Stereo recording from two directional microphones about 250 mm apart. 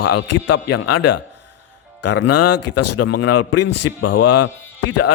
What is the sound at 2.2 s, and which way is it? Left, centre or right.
Speech, left.